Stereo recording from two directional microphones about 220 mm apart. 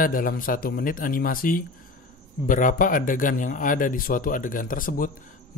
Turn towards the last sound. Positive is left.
turn(degrees=40)  # may be behind; listen again after turning